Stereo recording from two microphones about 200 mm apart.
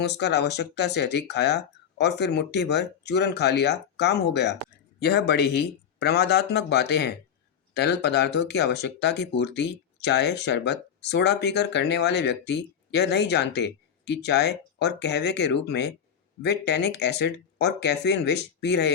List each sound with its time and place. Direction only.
0.0 s speech: 55° left (ahead or behind)